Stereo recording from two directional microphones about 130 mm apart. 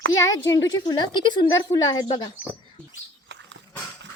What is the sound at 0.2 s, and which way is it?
A woman's voice, 30° left (ahead or behind).